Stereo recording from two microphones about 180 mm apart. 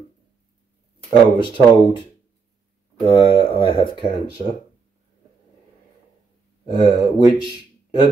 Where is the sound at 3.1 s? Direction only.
30° left (ahead or behind).